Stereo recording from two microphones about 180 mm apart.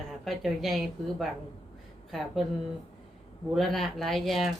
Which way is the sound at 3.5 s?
Centre (ahead or behind).